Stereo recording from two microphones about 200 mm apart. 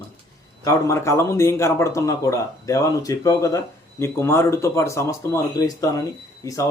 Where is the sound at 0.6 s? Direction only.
15° left (ahead or behind).